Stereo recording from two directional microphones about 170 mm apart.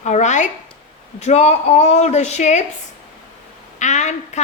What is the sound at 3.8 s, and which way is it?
Speech, 45° left (ahead or behind).